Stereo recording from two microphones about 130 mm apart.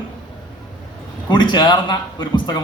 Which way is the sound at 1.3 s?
35° left (ahead or behind).